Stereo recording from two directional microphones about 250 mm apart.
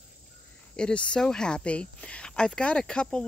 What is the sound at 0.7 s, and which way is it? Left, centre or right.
Speech, centre.